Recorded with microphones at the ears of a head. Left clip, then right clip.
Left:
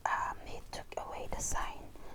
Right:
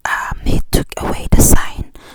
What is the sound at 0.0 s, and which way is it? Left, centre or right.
Whispering, right.